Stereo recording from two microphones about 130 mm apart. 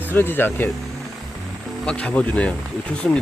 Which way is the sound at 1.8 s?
10° left (ahead or behind).